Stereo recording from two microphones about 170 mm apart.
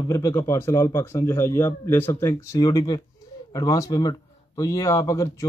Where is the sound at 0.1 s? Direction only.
20° left (ahead or behind).